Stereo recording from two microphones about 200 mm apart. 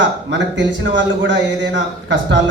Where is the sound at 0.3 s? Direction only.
65° right (ahead or behind).